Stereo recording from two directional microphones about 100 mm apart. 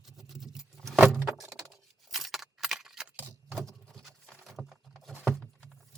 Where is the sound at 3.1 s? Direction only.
15° right (ahead or behind).